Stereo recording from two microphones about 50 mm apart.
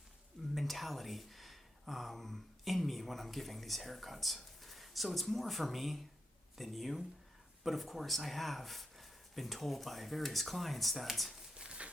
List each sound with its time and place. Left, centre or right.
0.5 s speech: centre
11.5 s pigeon: centre